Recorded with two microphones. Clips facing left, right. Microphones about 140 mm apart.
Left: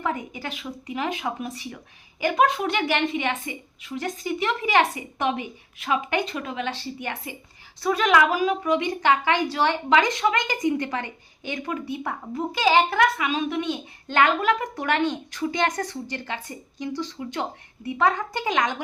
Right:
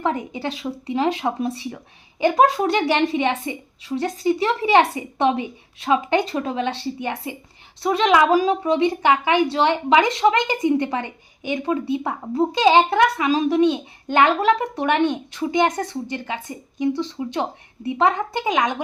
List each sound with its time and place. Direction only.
0.0 s a woman's voice: 30° right (ahead or behind)
16.9 s speech: 65° right (ahead or behind)
17.8 s a woman's voice: 25° right (ahead or behind)